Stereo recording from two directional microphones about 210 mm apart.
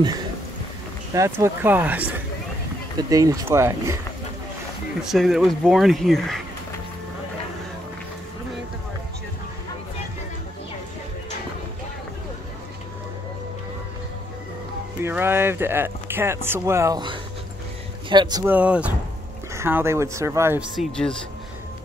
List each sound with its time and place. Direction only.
1.1 s speech: 15° right (ahead or behind)
5.0 s speech: centre (ahead or behind)
15.0 s speech: 10° right (ahead or behind)
18.4 s speech: 5° right (ahead or behind)
20.7 s speech: centre (ahead or behind)